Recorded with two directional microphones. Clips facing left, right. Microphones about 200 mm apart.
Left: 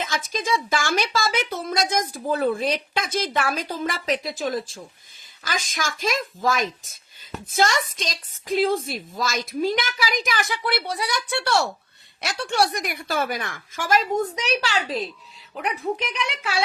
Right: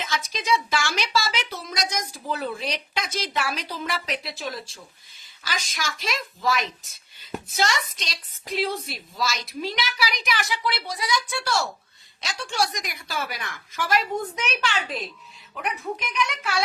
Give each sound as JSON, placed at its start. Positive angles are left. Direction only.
{"t": 0.0, "sound": "a woman's voice", "side_deg": 50}